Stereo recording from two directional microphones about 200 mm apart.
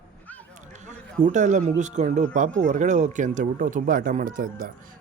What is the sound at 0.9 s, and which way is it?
A man's voice, 35° right (ahead or behind).